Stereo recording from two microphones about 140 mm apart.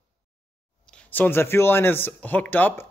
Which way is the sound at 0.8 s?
10° left (ahead or behind).